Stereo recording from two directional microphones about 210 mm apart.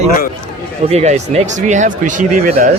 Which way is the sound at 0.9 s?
30° right (ahead or behind).